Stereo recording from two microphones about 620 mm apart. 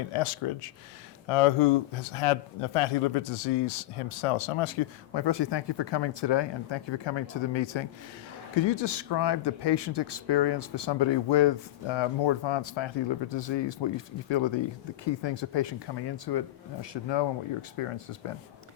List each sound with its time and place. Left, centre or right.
0.1 s speech: left